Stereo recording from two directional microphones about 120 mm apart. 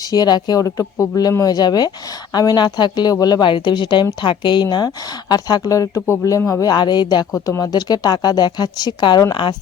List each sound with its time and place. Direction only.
0.1 s speech: 35° left (ahead or behind)